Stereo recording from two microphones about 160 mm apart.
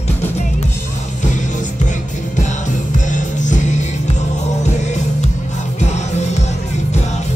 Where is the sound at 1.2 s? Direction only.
50° left (ahead or behind).